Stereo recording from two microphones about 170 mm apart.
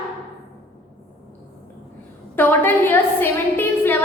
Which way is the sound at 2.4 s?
10° left (ahead or behind).